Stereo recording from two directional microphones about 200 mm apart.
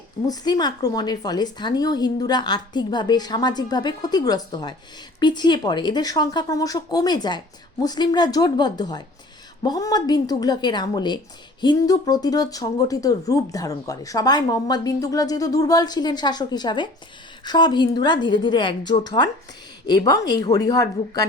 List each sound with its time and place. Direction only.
0.3 s speech: 20° left (ahead or behind)